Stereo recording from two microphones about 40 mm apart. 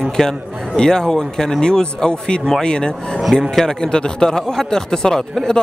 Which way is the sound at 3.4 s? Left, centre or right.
Centre.